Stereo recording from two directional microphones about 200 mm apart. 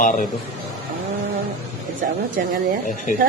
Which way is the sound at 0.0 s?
40° left (ahead or behind).